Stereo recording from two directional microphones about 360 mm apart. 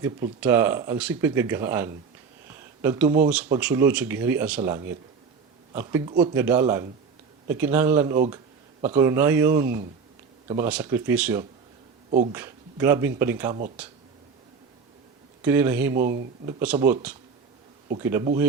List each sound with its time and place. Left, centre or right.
0.0 s speech: centre
15.4 s speech: centre
16.0 s speech: right
16.5 s speech: centre